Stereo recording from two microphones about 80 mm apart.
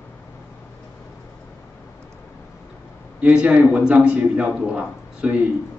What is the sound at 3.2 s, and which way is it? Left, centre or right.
A man's voice, centre.